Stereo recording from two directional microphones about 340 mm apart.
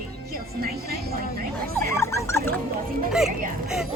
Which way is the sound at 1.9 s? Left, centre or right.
Centre.